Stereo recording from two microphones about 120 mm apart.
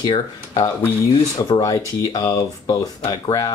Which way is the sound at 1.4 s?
35° left (ahead or behind).